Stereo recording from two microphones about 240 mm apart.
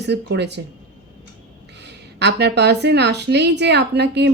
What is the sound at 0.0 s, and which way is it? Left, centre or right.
Speech, right.